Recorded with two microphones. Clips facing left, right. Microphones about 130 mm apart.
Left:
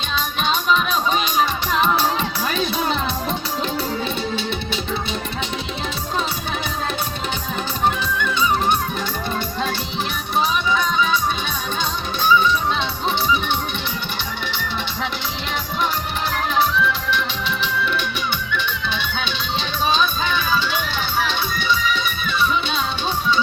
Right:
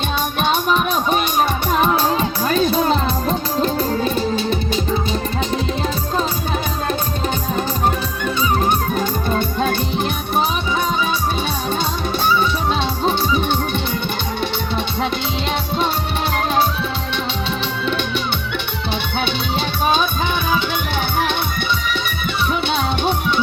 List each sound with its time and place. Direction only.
0.4 s music: 50° right (ahead or behind)
7.9 s music: 45° right (ahead or behind)
18.5 s music: 60° right (ahead or behind)